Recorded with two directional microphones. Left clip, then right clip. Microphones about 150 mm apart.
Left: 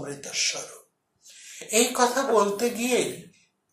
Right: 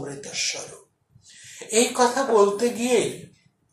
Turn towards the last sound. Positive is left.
turn(degrees=50)  # may be behind; listen again after turning